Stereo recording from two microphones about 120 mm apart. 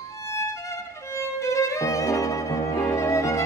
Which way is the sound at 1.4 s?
25° left (ahead or behind).